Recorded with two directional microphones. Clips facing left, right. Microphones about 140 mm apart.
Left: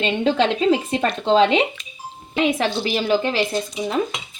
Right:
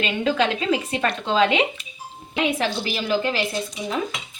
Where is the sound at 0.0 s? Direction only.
30° left (ahead or behind).